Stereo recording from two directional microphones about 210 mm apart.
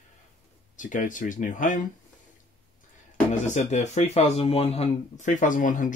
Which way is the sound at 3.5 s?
35° left (ahead or behind).